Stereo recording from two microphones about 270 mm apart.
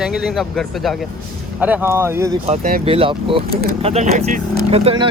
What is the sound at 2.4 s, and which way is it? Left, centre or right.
Speech, right.